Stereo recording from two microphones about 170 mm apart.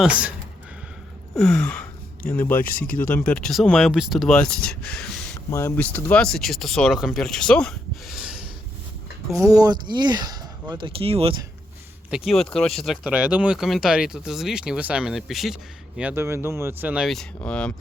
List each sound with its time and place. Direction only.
0.0 s speech: 5° right (ahead or behind)
1.4 s speech: 5° left (ahead or behind)
2.6 s speech: 55° left (ahead or behind)
3.0 s speech: 10° left (ahead or behind)
5.5 s speech: 15° left (ahead or behind); by 8.4 s 5° right (ahead or behind)
9.3 s speech: 20° right (ahead or behind)
12.1 s speech: centre (ahead or behind)